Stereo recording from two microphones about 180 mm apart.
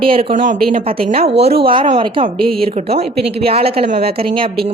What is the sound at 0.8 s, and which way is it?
A woman's voice, 35° right (ahead or behind).